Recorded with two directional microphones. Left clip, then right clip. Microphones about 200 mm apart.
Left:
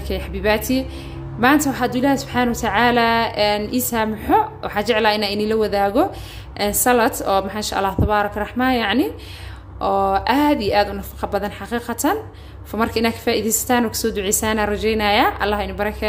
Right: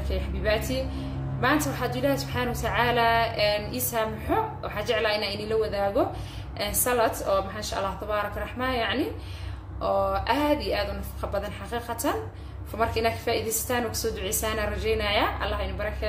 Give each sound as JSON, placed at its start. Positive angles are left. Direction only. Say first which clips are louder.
{"t": 0.1, "sound": "a woman's voice", "louder": "left 7 dB", "side_deg": 50}